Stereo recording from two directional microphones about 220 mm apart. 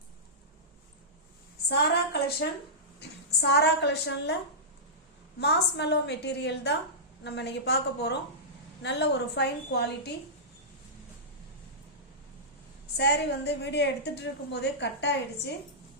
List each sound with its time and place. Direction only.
1.7 s a sound: 45° left (ahead or behind)
3.0 s a woman's voice: 50° left (ahead or behind)
5.4 s a woman's voice: 50° left (ahead or behind)
13.0 s a woman's voice: 50° left (ahead or behind)